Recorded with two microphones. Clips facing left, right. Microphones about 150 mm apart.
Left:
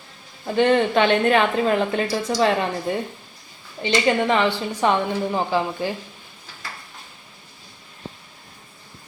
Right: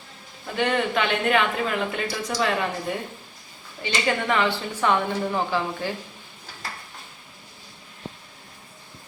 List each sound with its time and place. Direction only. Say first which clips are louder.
0.5 s a woman's voice: left 6 dB; 30° left (ahead or behind)
3.8 s a woman's voice: left 5 dB; 25° left (ahead or behind)